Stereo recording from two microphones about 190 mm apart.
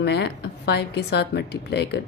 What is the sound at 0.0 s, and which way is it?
A woman's voice, 60° left (ahead or behind).